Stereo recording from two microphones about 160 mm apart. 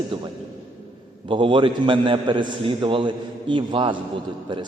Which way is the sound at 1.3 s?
30° right (ahead or behind).